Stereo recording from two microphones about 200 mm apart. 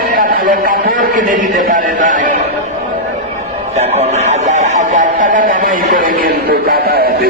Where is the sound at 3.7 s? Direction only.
35° right (ahead or behind).